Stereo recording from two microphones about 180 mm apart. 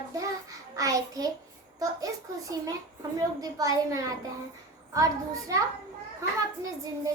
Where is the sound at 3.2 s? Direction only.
20° right (ahead or behind).